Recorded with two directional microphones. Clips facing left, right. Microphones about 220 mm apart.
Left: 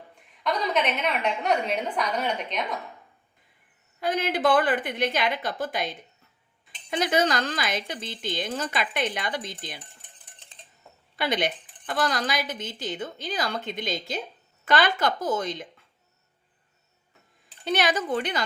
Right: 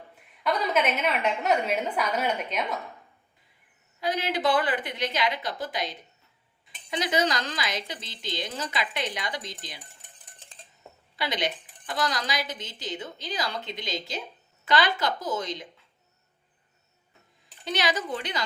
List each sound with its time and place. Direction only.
0.4 s a woman's voice: 5° right (ahead or behind)
4.0 s speech: 50° left (ahead or behind)
6.9 s speech: 50° left (ahead or behind)
11.2 s speech: 50° left (ahead or behind)
17.7 s speech: 50° left (ahead or behind)